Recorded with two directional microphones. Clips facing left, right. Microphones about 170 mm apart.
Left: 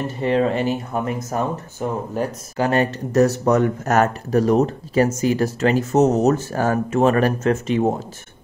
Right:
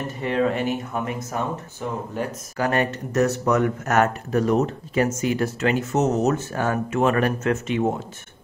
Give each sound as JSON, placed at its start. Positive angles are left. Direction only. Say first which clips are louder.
{"t": 0.2, "sound": "speech", "louder": "left 3 dB", "side_deg": 30}